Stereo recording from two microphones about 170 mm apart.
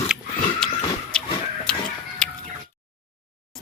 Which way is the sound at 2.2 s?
5° left (ahead or behind).